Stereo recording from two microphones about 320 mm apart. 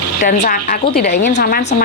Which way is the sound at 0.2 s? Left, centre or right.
Left.